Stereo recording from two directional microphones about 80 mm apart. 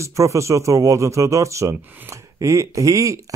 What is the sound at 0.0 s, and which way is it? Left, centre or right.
Speech, right.